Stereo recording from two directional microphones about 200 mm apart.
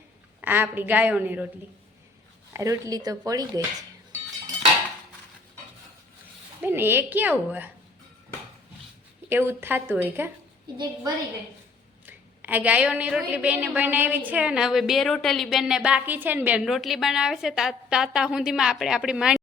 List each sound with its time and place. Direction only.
0.4 s speech: 10° right (ahead or behind)
2.5 s speech: 15° right (ahead or behind)
6.6 s speech: 10° right (ahead or behind)
9.3 s speech: 10° right (ahead or behind)
12.0 s a woman's voice: 10° right (ahead or behind)